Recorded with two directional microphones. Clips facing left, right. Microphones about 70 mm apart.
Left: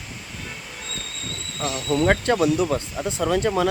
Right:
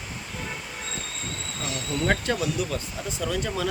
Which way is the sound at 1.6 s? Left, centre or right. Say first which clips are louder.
Left 6 dB; left.